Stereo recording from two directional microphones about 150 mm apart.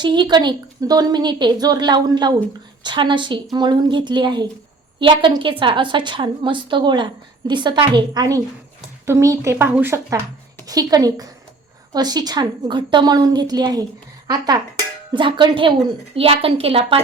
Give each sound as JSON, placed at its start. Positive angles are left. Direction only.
{"t": 0.0, "sound": "a woman's voice", "side_deg": -30}